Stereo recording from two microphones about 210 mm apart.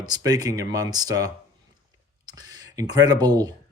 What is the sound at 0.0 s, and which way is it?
Speech, 20° right (ahead or behind).